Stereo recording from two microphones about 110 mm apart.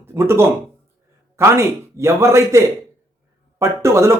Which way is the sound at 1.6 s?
25° right (ahead or behind).